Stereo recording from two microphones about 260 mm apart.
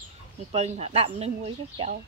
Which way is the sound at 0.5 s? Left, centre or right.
Right.